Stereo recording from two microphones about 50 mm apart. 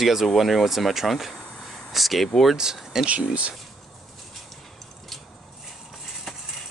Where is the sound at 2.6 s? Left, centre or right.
Centre.